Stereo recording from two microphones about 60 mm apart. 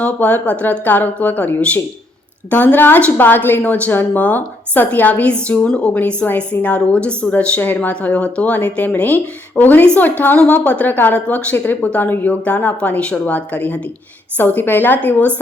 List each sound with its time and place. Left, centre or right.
0.0 s speech: left
5.3 s a woman's voice: centre